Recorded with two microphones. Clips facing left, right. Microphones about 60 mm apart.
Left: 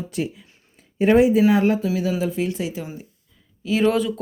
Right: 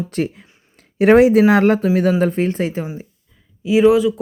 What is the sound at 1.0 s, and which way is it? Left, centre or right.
Speech, right.